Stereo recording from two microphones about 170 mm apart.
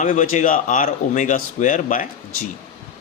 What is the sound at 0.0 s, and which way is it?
Speech, 50° left (ahead or behind).